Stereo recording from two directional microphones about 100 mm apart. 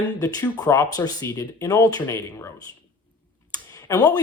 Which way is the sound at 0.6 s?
35° left (ahead or behind).